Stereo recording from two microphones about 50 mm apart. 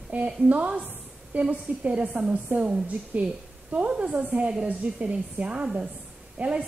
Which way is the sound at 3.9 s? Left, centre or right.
Centre.